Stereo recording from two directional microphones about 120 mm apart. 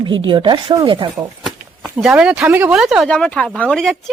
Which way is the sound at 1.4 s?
Centre (ahead or behind).